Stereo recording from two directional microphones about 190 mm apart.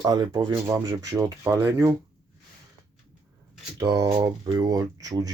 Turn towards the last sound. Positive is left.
turn(degrees=-20)  # may be behind; listen again after turning